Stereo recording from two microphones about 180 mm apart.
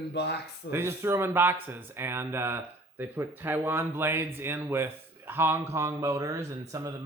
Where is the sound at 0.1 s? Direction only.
70° left (ahead or behind).